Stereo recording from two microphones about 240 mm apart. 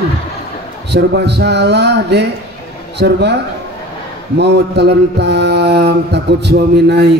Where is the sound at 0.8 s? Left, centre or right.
Right.